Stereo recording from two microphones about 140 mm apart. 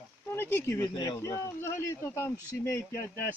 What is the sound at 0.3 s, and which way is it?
Speech, 15° left (ahead or behind).